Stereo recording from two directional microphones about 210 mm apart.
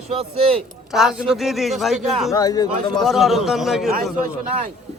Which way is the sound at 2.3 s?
15° left (ahead or behind).